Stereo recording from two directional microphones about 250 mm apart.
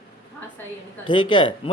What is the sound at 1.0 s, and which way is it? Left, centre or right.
Speech, centre.